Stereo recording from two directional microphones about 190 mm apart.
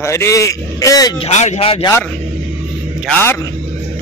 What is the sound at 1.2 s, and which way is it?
Speech, 35° left (ahead or behind).